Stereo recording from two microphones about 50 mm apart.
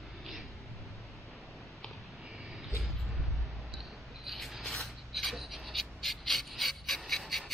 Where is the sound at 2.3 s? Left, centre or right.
Centre.